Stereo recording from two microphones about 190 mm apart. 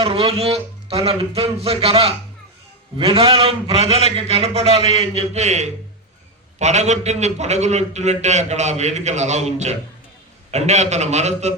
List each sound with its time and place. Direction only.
0.0 s a man's voice: 30° right (ahead or behind)